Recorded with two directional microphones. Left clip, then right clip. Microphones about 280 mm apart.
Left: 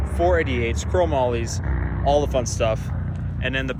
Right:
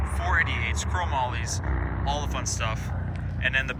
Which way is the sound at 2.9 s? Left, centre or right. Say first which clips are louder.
Left 2 dB; right.